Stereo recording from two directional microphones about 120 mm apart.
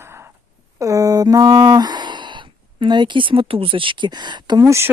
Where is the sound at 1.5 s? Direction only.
40° right (ahead or behind).